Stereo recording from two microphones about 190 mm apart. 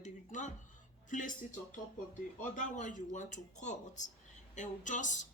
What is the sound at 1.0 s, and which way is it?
Speech, 45° left (ahead or behind).